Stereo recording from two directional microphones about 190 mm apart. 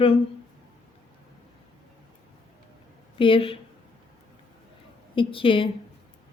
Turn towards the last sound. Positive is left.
turn(degrees=30)  # may be behind; listen again after turning